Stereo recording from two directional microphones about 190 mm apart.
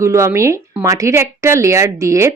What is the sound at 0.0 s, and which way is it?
Speech, 15° right (ahead or behind).